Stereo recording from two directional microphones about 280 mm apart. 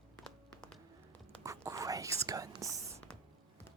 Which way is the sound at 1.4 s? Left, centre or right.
Centre.